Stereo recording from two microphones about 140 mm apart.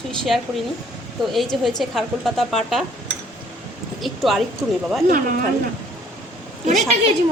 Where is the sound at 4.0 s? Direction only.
Centre (ahead or behind).